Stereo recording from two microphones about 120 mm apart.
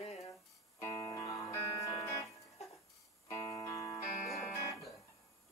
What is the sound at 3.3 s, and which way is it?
Music, 25° left (ahead or behind).